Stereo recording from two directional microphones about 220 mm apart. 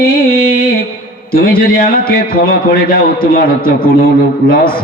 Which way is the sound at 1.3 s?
40° left (ahead or behind).